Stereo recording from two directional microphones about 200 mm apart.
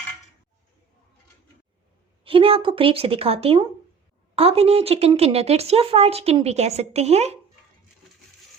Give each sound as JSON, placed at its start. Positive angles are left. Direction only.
{"t": 2.2, "sound": "a woman's voice", "side_deg": -25}